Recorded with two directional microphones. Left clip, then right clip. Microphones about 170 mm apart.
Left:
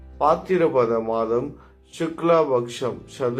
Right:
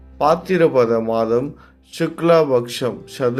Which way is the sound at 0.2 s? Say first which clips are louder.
Right 4 dB; 35° right (ahead or behind).